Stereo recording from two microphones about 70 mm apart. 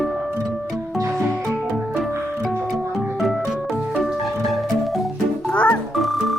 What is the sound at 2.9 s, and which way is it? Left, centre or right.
Organ, centre.